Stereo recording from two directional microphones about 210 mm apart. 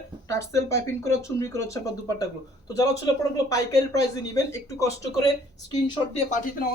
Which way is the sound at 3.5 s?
15° left (ahead or behind).